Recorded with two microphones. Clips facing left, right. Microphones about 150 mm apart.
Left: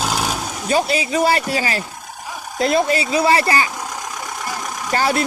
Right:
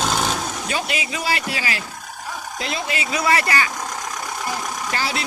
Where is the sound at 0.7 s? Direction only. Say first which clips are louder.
Left 11 dB; 35° left (ahead or behind).